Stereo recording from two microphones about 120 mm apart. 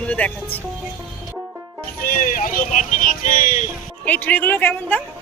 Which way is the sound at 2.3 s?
90° left.